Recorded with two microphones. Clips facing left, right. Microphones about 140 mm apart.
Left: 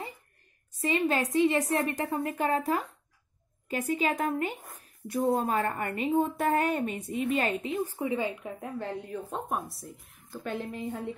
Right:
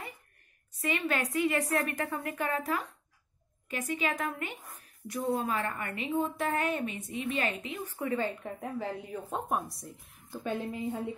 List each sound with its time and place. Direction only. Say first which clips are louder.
0.7 s a woman's voice: left 4 dB; 30° left (ahead or behind)
4.6 s a woman's voice: left 2 dB; 50° left (ahead or behind)
8.0 s a woman's voice: left 2 dB; 15° left (ahead or behind)
8.5 s a woman's voice: left 1 dB; centre (ahead or behind)